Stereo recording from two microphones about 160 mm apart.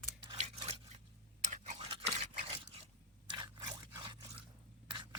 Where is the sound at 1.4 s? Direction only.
50° right (ahead or behind).